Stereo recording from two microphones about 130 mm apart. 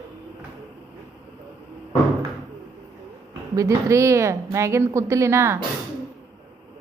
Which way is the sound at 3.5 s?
25° right (ahead or behind).